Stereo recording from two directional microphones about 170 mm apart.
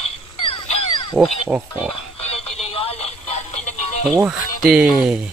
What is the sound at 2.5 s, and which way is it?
Telephone, 35° left (ahead or behind).